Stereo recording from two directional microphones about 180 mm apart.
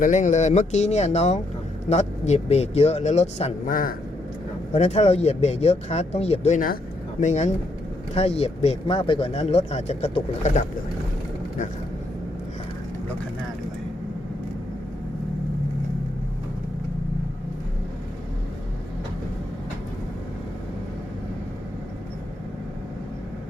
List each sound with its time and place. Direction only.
0.0 s speech: 45° left (ahead or behind)
3.7 s a man's voice: 50° left (ahead or behind)
4.7 s speech: 35° left (ahead or behind)